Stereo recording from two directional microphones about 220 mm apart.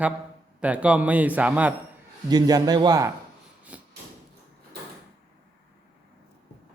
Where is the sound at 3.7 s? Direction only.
5° right (ahead or behind).